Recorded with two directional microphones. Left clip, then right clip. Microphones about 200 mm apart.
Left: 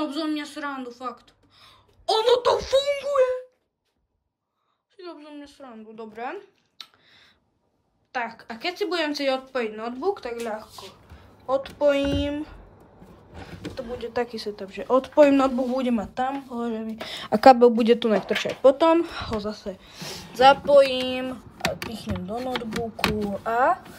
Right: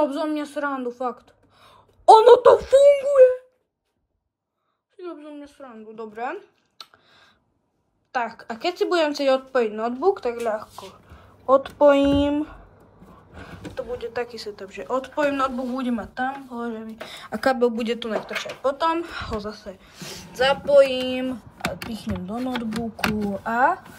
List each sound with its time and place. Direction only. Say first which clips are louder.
0.0 s speech: right 5 dB; 15° right (ahead or behind); by 3.4 s 5° left (ahead or behind)
4.9 s speech: right 3 dB; centre (ahead or behind)
13.3 s a sound: left 1 dB; 5° left (ahead or behind)
13.9 s speech: left 3 dB; 20° left (ahead or behind)
17.6 s speech: left 5 dB; 20° left (ahead or behind)
18.6 s speech: left 5 dB; 45° left (ahead or behind)
18.9 s speech: left 3 dB; 25° left (ahead or behind)
21.4 s speech: left 2 dB; centre (ahead or behind)
21.9 s speech: right 1 dB; 35° left (ahead or behind)
22.4 s speech: even; centre (ahead or behind)
23.4 s speech: right 1 dB; 40° left (ahead or behind)